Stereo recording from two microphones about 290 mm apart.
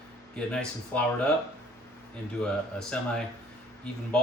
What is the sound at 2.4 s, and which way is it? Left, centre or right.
Speech, centre.